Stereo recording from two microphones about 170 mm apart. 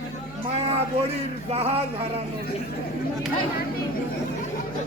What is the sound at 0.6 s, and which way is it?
Speech, 35° right (ahead or behind).